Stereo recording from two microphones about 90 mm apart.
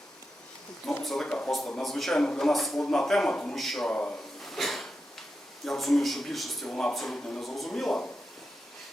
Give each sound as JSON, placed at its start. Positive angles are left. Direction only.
{"t": 1.0, "sound": "speech", "side_deg": 5}
{"t": 3.9, "sound": "speech", "side_deg": 15}
{"t": 4.4, "sound": "a sound", "side_deg": 0}
{"t": 5.6, "sound": "speech", "side_deg": 0}